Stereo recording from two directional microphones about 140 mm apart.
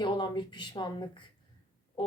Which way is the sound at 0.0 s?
35° left (ahead or behind).